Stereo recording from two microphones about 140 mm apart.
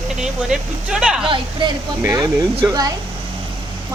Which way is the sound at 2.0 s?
20° right (ahead or behind).